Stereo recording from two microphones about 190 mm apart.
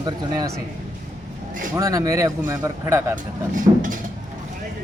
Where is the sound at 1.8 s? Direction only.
15° right (ahead or behind).